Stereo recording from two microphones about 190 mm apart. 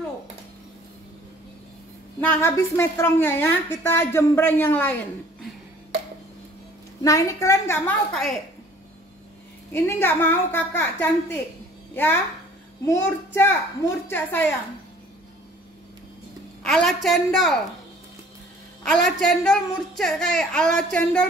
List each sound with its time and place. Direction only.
2.1 s a woman's voice: 15° left (ahead or behind)
7.0 s a woman's voice: 15° left (ahead or behind)
8.1 s speech: centre (ahead or behind)
9.7 s a woman's voice: 10° left (ahead or behind)
16.6 s speech: centre (ahead or behind)
19.0 s speech: centre (ahead or behind)